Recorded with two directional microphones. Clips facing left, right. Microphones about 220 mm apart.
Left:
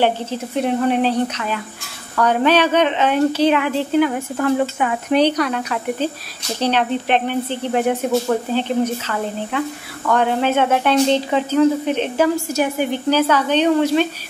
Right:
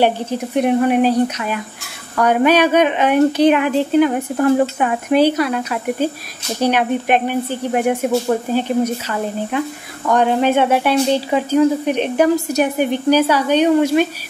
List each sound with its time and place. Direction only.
0.0 s speech: 15° right (ahead or behind)
5.1 s speech: 5° right (ahead or behind)
10.0 s speech: 15° right (ahead or behind)